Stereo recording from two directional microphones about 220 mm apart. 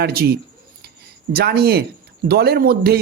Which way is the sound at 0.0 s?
45° right (ahead or behind).